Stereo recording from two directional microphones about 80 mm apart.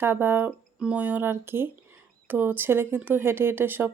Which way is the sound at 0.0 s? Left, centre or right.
Right.